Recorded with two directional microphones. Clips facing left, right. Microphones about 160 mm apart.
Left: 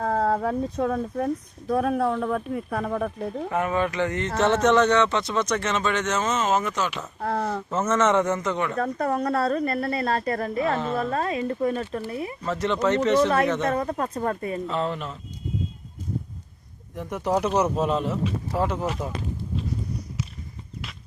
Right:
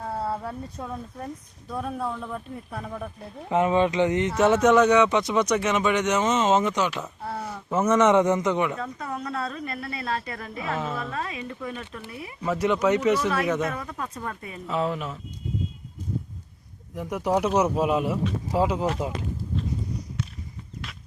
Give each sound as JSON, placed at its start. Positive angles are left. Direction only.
{"t": 0.0, "sound": "speech", "side_deg": 90}
{"t": 3.5, "sound": "speech", "side_deg": -20}
{"t": 7.2, "sound": "speech", "side_deg": 90}
{"t": 7.7, "sound": "speech", "side_deg": -15}
{"t": 8.8, "sound": "speech", "side_deg": 50}
{"t": 12.4, "sound": "speech", "side_deg": -10}
{"t": 13.7, "sound": "speech", "side_deg": 45}
{"t": 14.7, "sound": "speech", "side_deg": -5}
{"t": 16.9, "sound": "speech", "side_deg": -5}